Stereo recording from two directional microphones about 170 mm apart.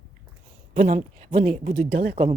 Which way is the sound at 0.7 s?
45° right (ahead or behind).